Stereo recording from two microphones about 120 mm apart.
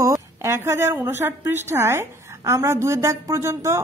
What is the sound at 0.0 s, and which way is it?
A woman's voice, 25° right (ahead or behind).